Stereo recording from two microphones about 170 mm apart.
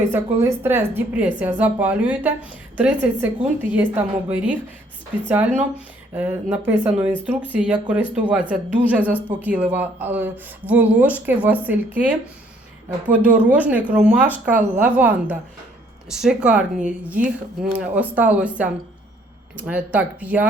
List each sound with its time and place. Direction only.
0.1 s speech: 15° right (ahead or behind)